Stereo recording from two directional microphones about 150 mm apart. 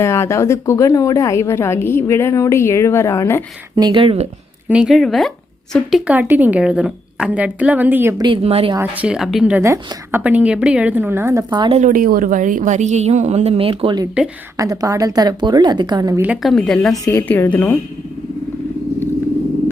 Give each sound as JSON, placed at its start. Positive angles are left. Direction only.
{"t": 0.0, "sound": "a woman's voice", "side_deg": 20}
{"t": 3.8, "sound": "speech", "side_deg": -30}
{"t": 4.7, "sound": "speech", "side_deg": -5}
{"t": 6.1, "sound": "a woman's voice", "side_deg": -10}
{"t": 8.2, "sound": "speech", "side_deg": -35}
{"t": 8.7, "sound": "speech", "side_deg": -10}
{"t": 9.6, "sound": "a woman's voice", "side_deg": -20}
{"t": 11.8, "sound": "a woman's voice", "side_deg": -65}
{"t": 16.2, "sound": "a woman's voice", "side_deg": -10}
{"t": 16.5, "sound": "speech", "side_deg": 5}
{"t": 17.1, "sound": "a woman's voice", "side_deg": 15}